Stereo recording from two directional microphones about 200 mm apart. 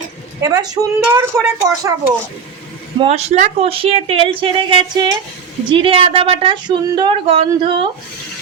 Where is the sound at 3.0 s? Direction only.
35° right (ahead or behind).